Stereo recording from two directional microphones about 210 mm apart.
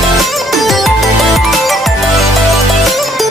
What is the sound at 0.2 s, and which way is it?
Music, centre (ahead or behind).